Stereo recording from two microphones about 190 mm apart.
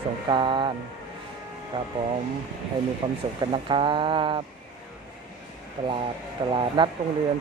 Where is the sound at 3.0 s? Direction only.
40° right (ahead or behind).